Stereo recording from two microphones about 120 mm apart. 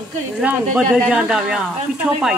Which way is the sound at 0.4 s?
10° right (ahead or behind).